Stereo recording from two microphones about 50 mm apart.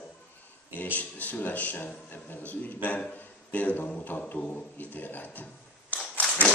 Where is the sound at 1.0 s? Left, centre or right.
Left.